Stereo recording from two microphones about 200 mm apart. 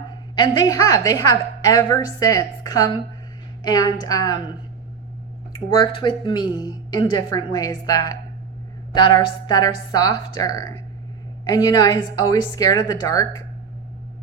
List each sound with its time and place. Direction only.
0.3 s a woman's voice: 20° left (ahead or behind)
5.5 s a woman's voice: 25° left (ahead or behind)
9.2 s a woman's voice: 20° left (ahead or behind)